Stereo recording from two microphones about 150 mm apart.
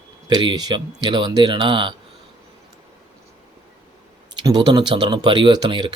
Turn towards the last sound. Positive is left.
turn(degrees=-30)  # may be behind; listen again after turning